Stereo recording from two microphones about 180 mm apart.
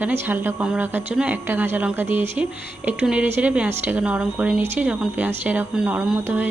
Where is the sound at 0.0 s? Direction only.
10° right (ahead or behind).